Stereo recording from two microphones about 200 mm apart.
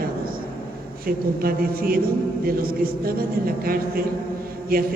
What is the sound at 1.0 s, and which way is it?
A woman's voice, 45° right (ahead or behind).